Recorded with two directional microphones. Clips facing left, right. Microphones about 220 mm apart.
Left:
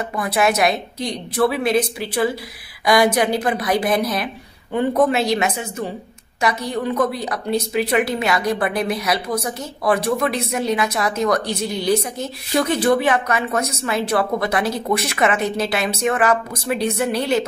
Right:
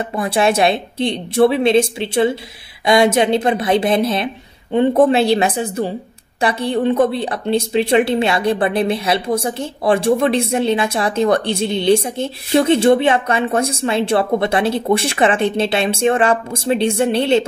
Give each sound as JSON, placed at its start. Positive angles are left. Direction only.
{"t": 0.1, "sound": "a woman's voice", "side_deg": -30}